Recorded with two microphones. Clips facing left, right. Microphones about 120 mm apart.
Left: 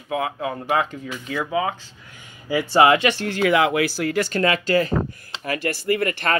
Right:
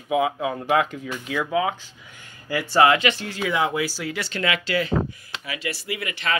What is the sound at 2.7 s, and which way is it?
Speech, 25° left (ahead or behind).